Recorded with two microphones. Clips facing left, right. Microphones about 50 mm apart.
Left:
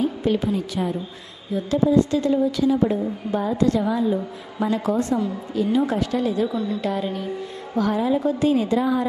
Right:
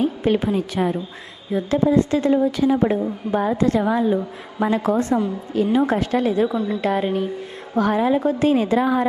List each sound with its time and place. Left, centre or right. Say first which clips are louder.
0.0 s a woman's voice: right 2 dB; right